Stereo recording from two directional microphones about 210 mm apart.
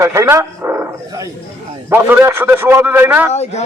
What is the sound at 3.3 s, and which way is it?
Speech, 30° left (ahead or behind).